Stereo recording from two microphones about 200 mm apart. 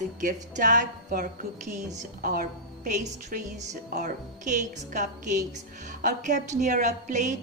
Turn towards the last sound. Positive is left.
turn(degrees=-35)  # may be behind; listen again after turning